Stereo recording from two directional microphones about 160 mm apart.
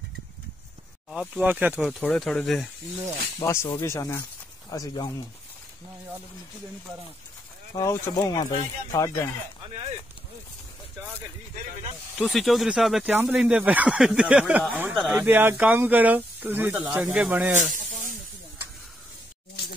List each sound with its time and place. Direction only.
1.1 s speech: 5° right (ahead or behind)
1.8 s speech: centre (ahead or behind)
3.3 s speech: 15° left (ahead or behind)
7.7 s speech: 20° left (ahead or behind)
12.2 s speech: centre (ahead or behind)
17.6 s snake: 50° right (ahead or behind)